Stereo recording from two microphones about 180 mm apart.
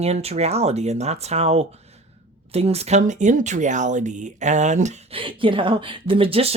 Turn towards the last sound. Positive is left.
turn(degrees=-30)  # may be behind; listen again after turning